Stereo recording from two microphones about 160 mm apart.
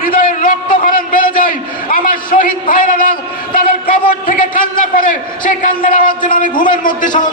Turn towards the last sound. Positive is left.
turn(degrees=55)  # may be behind; listen again after turning